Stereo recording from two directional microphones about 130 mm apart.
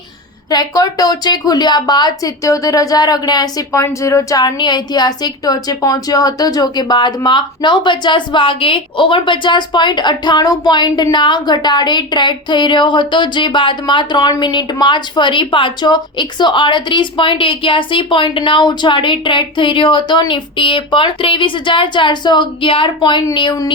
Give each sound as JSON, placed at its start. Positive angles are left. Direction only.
{"t": 0.5, "sound": "speech", "side_deg": 30}